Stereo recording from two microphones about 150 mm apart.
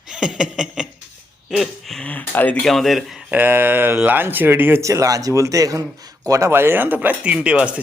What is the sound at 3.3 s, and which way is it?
Speech, 15° right (ahead or behind).